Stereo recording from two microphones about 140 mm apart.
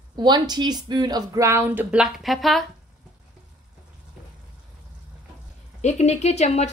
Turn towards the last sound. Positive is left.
turn(degrees=55)  # may be behind; listen again after turning